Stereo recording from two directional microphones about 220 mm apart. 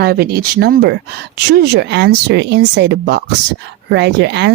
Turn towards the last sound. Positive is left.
turn(degrees=-50)  # may be behind; listen again after turning